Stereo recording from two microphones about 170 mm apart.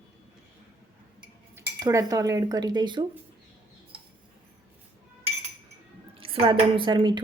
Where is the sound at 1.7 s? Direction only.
25° right (ahead or behind).